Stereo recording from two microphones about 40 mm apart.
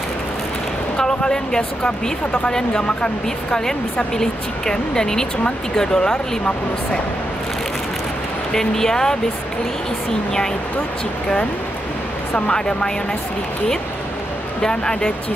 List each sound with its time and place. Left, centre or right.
0.9 s speech: centre
4.2 s speech: centre
8.5 s speech: centre
12.4 s speech: left
14.6 s speech: centre